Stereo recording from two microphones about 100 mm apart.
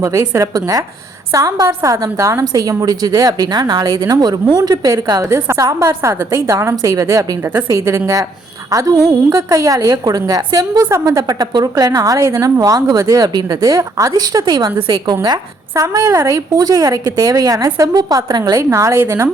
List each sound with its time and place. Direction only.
0.0 s a woman's voice: 30° right (ahead or behind)
5.2 s a woman's voice: 30° right (ahead or behind)
15.7 s a woman's voice: 35° right (ahead or behind)
18.7 s a woman's voice: 30° right (ahead or behind)